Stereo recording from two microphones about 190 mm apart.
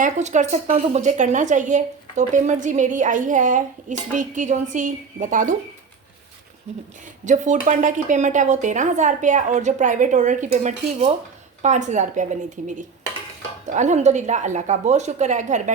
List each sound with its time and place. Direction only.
0.0 s a woman's voice: 40° right (ahead or behind)
7.3 s a woman's voice: 40° right (ahead or behind)